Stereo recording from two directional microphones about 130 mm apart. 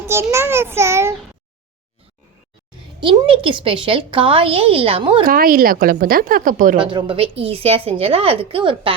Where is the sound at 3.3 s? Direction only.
40° right (ahead or behind).